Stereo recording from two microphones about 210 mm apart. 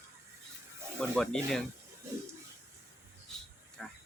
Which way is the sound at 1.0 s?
5° left (ahead or behind).